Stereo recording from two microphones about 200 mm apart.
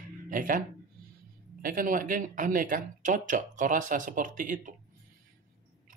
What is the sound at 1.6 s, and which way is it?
Speech, 45° right (ahead or behind).